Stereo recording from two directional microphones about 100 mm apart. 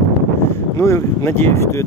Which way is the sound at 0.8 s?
30° left (ahead or behind).